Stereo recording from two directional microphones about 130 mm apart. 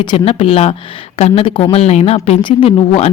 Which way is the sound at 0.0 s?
45° left (ahead or behind).